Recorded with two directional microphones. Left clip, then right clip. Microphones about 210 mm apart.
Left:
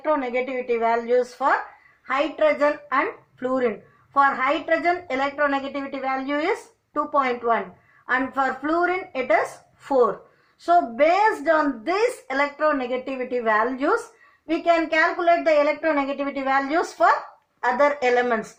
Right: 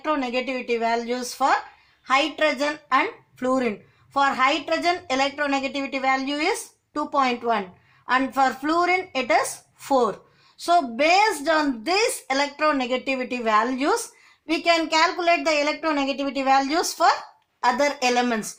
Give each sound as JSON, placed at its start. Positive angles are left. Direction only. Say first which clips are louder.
{"t": 0.0, "sound": "speech", "louder": "left 2 dB", "side_deg": -50}
{"t": 10.7, "sound": "speech", "louder": "left 1 dB", "side_deg": -50}